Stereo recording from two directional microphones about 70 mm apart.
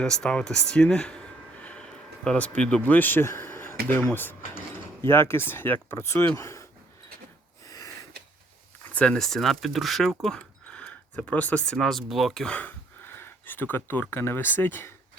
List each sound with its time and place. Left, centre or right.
0.0 s speech: centre
1.6 s a sound: centre
2.6 s speech: centre
2.9 s speech: left
8.9 s a sound: centre
9.1 s speech: centre
10.2 s a sound: centre
11.9 s speech: centre
12.5 s speech: left